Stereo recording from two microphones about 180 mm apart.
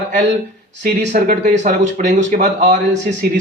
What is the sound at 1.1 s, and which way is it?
Speech, 50° right (ahead or behind).